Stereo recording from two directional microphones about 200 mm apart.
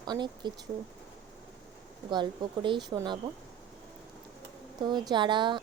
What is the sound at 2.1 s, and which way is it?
Speech, 25° right (ahead or behind).